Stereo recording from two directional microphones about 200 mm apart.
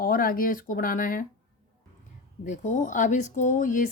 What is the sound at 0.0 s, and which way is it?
Speech, 45° left (ahead or behind).